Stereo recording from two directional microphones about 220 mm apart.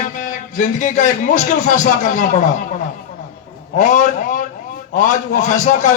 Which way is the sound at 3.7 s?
35° left (ahead or behind).